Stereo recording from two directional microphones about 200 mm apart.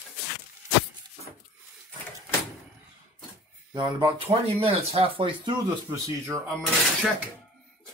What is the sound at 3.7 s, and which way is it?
Speech, 20° right (ahead or behind).